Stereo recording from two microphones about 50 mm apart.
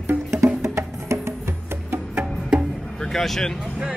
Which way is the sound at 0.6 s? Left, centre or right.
Right.